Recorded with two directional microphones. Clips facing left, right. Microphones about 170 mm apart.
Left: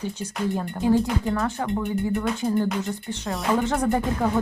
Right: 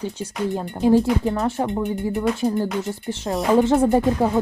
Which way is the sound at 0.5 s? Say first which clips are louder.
Right 4 dB; 20° right (ahead or behind).